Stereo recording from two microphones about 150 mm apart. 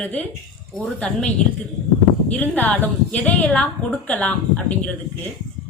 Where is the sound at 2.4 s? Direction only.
10° left (ahead or behind).